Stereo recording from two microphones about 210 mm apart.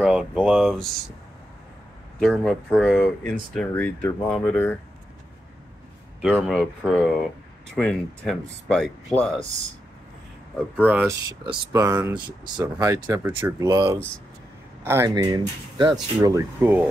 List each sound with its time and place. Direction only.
0.0 s speech: 5° right (ahead or behind)
2.1 s speech: centre (ahead or behind)
6.3 s speech: centre (ahead or behind)
10.8 s speech: 10° right (ahead or behind)